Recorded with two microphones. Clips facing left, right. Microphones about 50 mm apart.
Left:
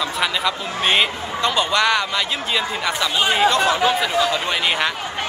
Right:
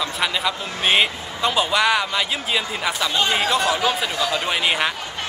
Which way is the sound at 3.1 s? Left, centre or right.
Centre.